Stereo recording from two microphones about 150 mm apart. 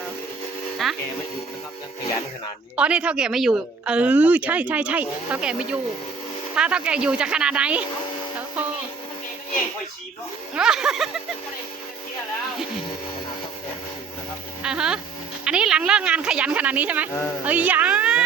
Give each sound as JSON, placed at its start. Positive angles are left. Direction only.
{"t": 0.8, "sound": "speech", "side_deg": 0}
{"t": 2.7, "sound": "speech", "side_deg": -10}
{"t": 10.5, "sound": "speech", "side_deg": -5}
{"t": 14.6, "sound": "speech", "side_deg": -5}
{"t": 17.1, "sound": "speech", "side_deg": 15}
{"t": 17.4, "sound": "speech", "side_deg": -10}